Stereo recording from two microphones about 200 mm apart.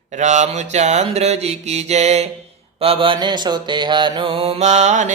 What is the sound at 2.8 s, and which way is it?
Mantra, 25° right (ahead or behind).